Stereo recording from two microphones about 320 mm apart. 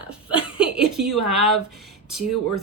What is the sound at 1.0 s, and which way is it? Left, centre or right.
Speech, right.